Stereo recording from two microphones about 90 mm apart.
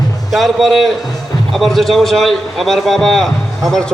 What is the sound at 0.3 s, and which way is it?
A man's voice, centre (ahead or behind).